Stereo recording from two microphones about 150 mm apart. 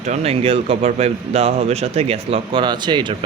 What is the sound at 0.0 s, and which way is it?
Speech, 45° right (ahead or behind).